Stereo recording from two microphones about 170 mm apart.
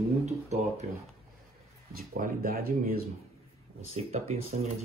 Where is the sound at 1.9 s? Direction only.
55° right (ahead or behind).